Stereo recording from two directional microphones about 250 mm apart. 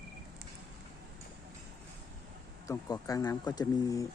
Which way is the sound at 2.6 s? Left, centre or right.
Centre.